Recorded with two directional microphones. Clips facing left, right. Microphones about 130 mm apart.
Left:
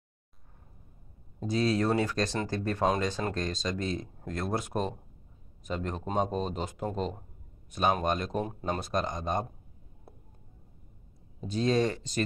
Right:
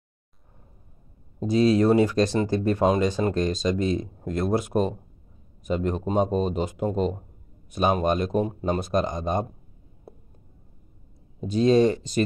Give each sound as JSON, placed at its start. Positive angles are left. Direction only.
{"t": 1.4, "sound": "speech", "side_deg": -15}
{"t": 11.4, "sound": "speech", "side_deg": -15}